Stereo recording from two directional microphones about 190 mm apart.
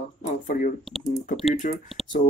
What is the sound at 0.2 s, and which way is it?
Speech, 45° left (ahead or behind).